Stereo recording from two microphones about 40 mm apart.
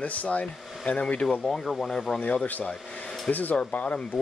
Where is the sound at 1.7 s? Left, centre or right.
Centre.